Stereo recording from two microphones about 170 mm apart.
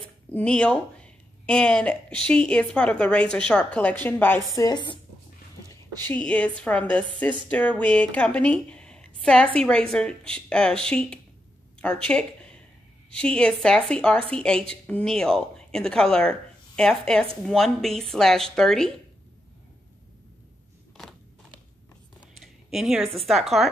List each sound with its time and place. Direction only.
0.3 s a woman's voice: 5° left (ahead or behind)
4.6 s speech: 25° left (ahead or behind)
6.0 s a woman's voice: 5° left (ahead or behind)
22.4 s a sound: centre (ahead or behind)
23.1 s speech: centre (ahead or behind)